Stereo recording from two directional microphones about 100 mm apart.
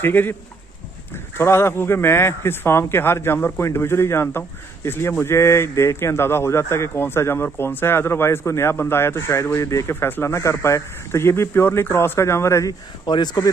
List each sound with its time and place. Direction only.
0.0 s a man's voice: 20° left (ahead or behind)
13.0 s speech: 45° left (ahead or behind)